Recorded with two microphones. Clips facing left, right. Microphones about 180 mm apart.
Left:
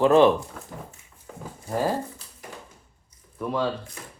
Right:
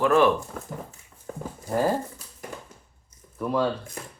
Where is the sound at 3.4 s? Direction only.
Centre (ahead or behind).